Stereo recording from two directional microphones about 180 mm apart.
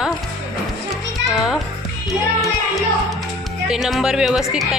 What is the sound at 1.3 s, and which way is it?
Speech, centre (ahead or behind).